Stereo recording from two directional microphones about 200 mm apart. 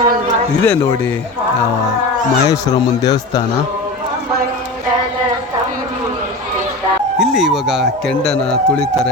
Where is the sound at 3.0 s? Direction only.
20° left (ahead or behind).